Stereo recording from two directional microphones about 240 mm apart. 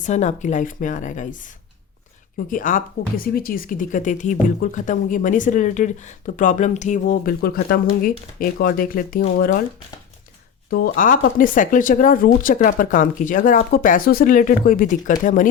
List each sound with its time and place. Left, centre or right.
0.0 s speech: left
2.5 s speech: left
10.7 s speech: left